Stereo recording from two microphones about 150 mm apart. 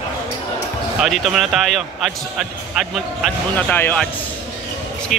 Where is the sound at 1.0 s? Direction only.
Centre (ahead or behind).